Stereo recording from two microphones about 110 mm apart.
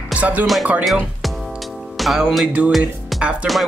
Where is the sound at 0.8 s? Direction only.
Centre (ahead or behind).